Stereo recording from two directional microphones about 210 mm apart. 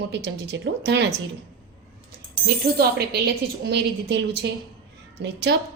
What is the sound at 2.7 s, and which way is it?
A woman's voice, 45° right (ahead or behind).